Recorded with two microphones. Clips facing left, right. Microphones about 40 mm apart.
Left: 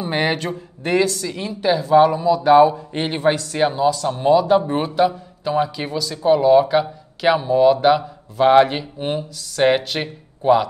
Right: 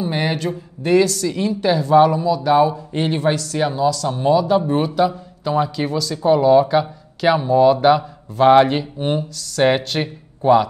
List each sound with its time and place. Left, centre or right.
0.0 s speech: left
1.2 s a man's voice: centre
2.2 s a man's voice: left; by 10.7 s centre